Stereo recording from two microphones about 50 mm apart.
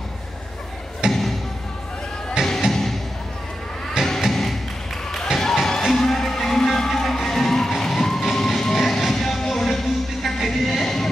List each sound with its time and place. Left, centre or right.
1.0 s music: centre
2.4 s music: centre
2.7 s music: centre
4.0 s a sound: centre
4.3 s music: centre